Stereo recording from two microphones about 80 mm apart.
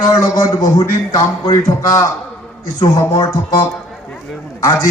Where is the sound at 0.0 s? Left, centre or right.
Left.